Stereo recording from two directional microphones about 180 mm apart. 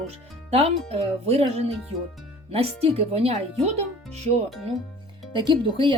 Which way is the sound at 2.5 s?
35° right (ahead or behind).